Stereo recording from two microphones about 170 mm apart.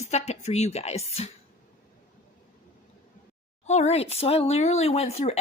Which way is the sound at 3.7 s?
40° left (ahead or behind).